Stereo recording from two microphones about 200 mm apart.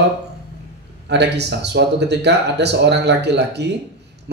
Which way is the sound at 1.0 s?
60° right (ahead or behind).